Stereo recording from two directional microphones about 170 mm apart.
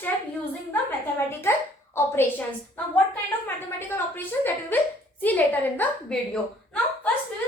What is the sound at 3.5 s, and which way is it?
A woman's voice, 10° left (ahead or behind).